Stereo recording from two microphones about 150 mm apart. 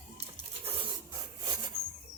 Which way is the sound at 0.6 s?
40° right (ahead or behind).